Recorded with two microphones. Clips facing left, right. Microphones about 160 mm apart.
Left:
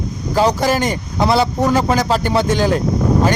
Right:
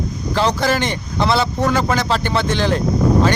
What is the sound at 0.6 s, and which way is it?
Speech, 10° left (ahead or behind).